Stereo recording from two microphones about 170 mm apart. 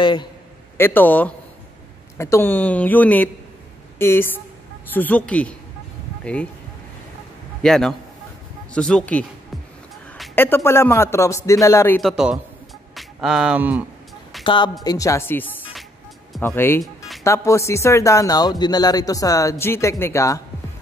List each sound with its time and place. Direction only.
0.0 s speech: 25° left (ahead or behind)
0.7 s speech: 10° left (ahead or behind)
7.6 s speech: 5° left (ahead or behind)
10.3 s speech: 10° left (ahead or behind)
12.0 s speech: centre (ahead or behind)
14.4 s speech: 25° left (ahead or behind)